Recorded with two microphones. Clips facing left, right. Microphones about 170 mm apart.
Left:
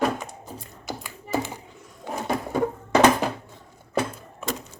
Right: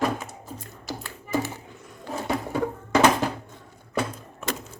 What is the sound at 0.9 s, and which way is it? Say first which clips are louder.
Tap: left 1 dB; 15° left (ahead or behind).